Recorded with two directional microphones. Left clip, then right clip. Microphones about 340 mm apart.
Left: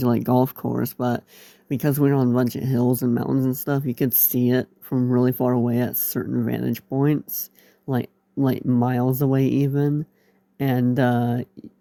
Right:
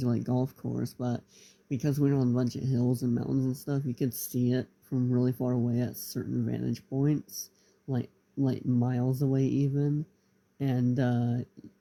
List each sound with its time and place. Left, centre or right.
0.0 s speech: left
7.9 s speech: left